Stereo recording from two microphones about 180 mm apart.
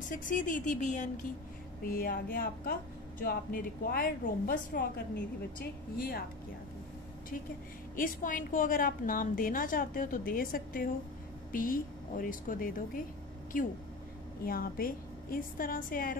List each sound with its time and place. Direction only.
0.1 s a woman's voice: 45° left (ahead or behind)
1.9 s speech: 55° left (ahead or behind)
7.9 s a woman's voice: 50° left (ahead or behind)